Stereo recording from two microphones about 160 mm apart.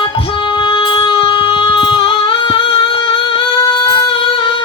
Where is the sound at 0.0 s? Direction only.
30° left (ahead or behind).